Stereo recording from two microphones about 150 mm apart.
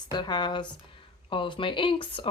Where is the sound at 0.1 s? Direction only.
30° left (ahead or behind).